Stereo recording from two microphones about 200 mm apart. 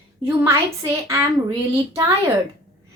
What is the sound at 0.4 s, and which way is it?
Speech, 15° right (ahead or behind).